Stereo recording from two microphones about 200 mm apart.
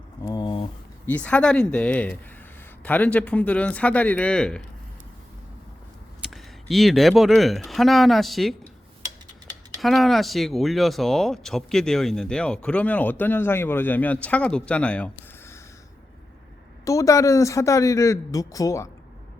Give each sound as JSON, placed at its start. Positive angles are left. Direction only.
{"t": 0.2, "sound": "a sound", "side_deg": 20}
{"t": 1.0, "sound": "speech", "side_deg": 5}
{"t": 6.2, "sound": "speech", "side_deg": 0}
{"t": 9.8, "sound": "speech", "side_deg": 0}
{"t": 16.8, "sound": "speech", "side_deg": 15}